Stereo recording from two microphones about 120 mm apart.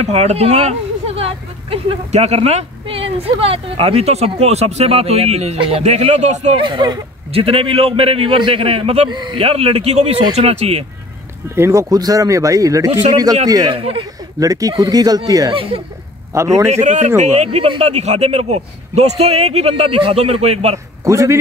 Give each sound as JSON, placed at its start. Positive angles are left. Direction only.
{"t": 0.0, "sound": "speech", "side_deg": -60}
{"t": 6.6, "sound": "speech", "side_deg": -40}
{"t": 7.3, "sound": "a man's voice", "side_deg": -50}
{"t": 9.1, "sound": "speech", "side_deg": -40}
{"t": 9.4, "sound": "speech", "side_deg": -55}
{"t": 11.5, "sound": "speech", "side_deg": -20}
{"t": 11.9, "sound": "speech", "side_deg": -30}
{"t": 13.7, "sound": "a man's voice", "side_deg": -50}
{"t": 14.4, "sound": "speech", "side_deg": -30}
{"t": 15.5, "sound": "a man's voice", "side_deg": -50}
{"t": 16.3, "sound": "speech", "side_deg": -30}
{"t": 16.6, "sound": "speech", "side_deg": -70}
{"t": 21.0, "sound": "a man's voice", "side_deg": -25}